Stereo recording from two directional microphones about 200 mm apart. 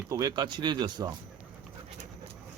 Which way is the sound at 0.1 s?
20° right (ahead or behind).